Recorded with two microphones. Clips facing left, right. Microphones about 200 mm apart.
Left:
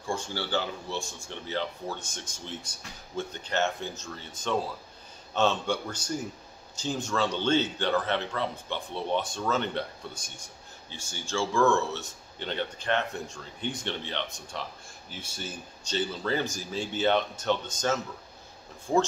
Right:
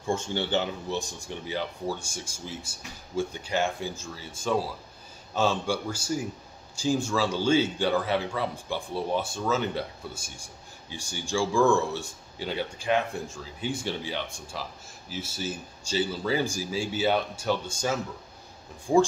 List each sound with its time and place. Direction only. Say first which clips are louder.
0.0 s speech: right 4 dB; 25° right (ahead or behind)